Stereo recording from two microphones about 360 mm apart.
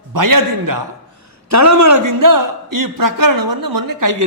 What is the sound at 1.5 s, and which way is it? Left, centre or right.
A man's voice, right.